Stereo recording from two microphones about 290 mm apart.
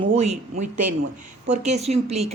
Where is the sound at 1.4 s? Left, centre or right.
Right.